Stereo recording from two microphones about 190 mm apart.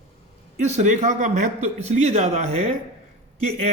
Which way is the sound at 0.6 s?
40° right (ahead or behind).